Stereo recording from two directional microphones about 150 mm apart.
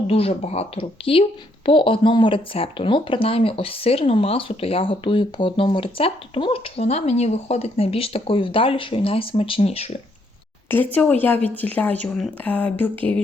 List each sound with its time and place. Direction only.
0.1 s a woman's voice: 40° left (ahead or behind)
10.7 s speech: 10° left (ahead or behind)